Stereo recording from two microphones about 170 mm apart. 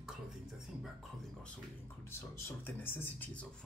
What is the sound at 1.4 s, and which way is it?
Speech, 15° left (ahead or behind).